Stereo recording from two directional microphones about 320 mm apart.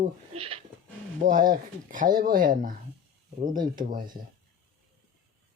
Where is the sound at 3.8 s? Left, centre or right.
Right.